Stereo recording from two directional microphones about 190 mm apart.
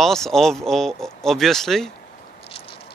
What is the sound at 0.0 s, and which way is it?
Speech, centre (ahead or behind).